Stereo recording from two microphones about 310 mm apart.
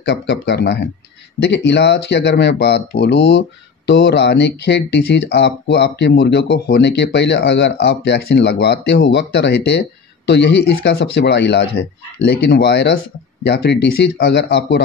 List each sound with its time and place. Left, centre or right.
0.0 s speech: left